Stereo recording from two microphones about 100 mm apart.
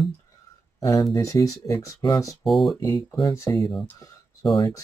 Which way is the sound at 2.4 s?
Centre (ahead or behind).